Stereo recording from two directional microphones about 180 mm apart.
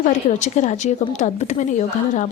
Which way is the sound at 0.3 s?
40° left (ahead or behind).